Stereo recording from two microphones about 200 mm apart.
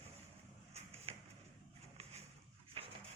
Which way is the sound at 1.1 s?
30° right (ahead or behind).